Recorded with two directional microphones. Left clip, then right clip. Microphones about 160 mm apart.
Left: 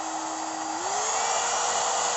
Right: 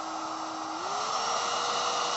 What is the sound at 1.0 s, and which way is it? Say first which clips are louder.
Dental drill: left 2 dB; 15° left (ahead or behind).